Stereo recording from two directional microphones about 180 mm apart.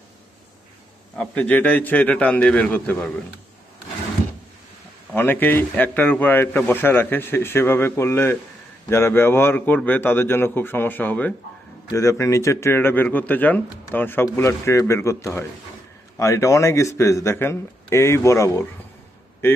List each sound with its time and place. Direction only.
1.1 s speech: 5° left (ahead or behind)
5.1 s speech: 10° left (ahead or behind)